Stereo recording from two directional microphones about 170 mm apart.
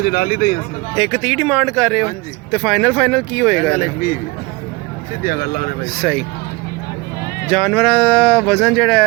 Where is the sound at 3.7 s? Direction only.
60° left (ahead or behind).